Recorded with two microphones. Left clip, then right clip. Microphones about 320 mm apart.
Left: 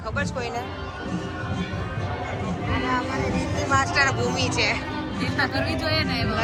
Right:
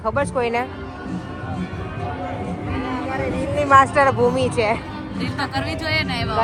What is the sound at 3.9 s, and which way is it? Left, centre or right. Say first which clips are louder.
Speech: right 6 dB; centre.